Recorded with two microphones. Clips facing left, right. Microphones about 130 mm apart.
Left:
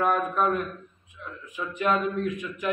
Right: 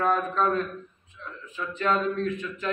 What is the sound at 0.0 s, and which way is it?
A man's voice, 15° left (ahead or behind).